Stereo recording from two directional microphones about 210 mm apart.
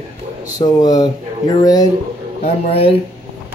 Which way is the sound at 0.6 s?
20° left (ahead or behind).